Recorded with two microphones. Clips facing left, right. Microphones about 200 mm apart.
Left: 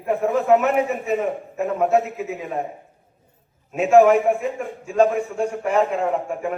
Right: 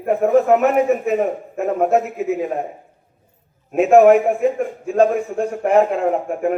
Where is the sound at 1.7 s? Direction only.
40° right (ahead or behind).